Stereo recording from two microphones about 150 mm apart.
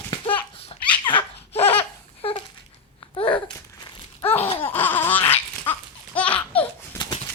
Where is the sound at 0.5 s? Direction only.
35° left (ahead or behind).